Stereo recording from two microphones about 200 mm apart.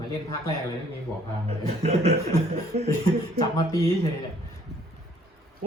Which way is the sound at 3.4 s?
15° left (ahead or behind).